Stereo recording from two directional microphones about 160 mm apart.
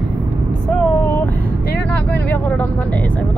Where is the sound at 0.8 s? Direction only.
15° left (ahead or behind).